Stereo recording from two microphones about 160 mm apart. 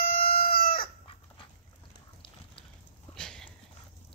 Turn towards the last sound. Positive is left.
turn(degrees=5)  # may be behind; listen again after turning